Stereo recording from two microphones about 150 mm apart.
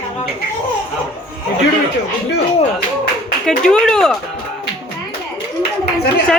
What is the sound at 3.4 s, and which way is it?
Speech, 5° left (ahead or behind).